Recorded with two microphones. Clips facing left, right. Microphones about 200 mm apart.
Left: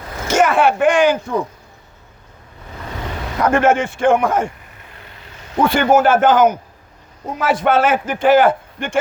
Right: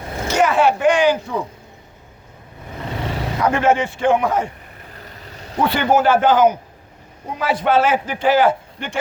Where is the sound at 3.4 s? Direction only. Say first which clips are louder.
Left 2 dB; 50° left (ahead or behind).